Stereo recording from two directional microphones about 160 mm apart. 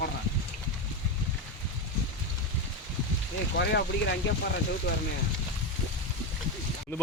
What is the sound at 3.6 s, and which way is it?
Speech, 90° left.